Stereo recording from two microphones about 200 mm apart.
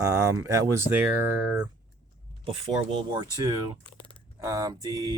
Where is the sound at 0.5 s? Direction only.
15° right (ahead or behind).